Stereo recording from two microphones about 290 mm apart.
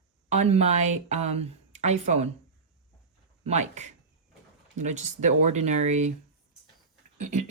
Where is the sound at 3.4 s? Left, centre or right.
Right.